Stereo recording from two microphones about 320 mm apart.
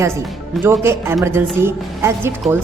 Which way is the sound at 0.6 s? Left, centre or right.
Centre.